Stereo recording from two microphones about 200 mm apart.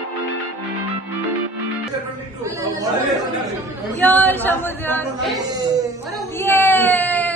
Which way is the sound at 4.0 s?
10° left (ahead or behind).